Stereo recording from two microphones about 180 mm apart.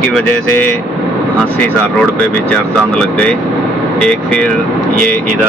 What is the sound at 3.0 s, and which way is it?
Speech, 5° left (ahead or behind).